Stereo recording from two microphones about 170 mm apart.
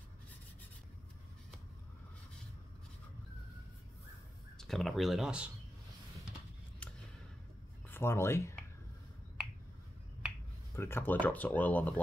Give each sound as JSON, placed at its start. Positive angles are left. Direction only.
{"t": 4.6, "sound": "speech", "side_deg": 0}
{"t": 6.8, "sound": "a sound", "side_deg": 5}
{"t": 7.9, "sound": "speech", "side_deg": 15}
{"t": 10.8, "sound": "speech", "side_deg": 15}